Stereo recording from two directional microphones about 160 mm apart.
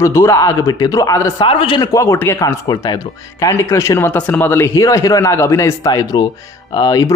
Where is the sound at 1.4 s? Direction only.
30° left (ahead or behind).